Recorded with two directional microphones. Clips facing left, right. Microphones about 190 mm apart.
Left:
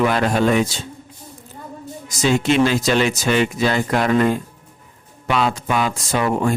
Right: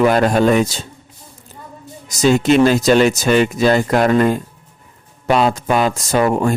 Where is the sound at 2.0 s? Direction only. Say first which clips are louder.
Right 4 dB; 40° right (ahead or behind).